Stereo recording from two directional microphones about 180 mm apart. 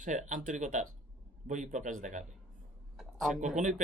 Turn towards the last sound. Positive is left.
turn(degrees=-45)  # may be behind; listen again after turning